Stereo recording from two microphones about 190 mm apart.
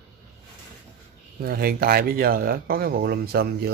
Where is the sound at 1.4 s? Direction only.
50° right (ahead or behind).